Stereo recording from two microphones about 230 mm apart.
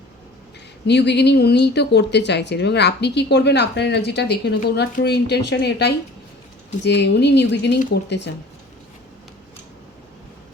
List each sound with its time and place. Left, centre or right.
0.9 s a woman's voice: left